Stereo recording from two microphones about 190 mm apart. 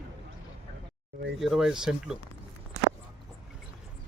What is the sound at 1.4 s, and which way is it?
Speech, centre (ahead or behind).